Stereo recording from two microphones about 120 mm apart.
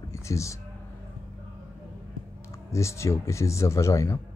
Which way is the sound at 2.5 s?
25° left (ahead or behind).